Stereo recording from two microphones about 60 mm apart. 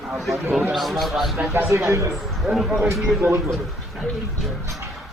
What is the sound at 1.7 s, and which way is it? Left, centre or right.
Speech, right.